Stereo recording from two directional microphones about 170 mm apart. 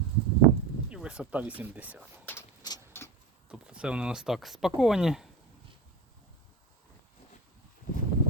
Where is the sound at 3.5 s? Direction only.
5° right (ahead or behind).